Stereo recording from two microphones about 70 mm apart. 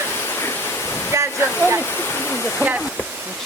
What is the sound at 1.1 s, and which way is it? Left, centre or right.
Waterfall, right.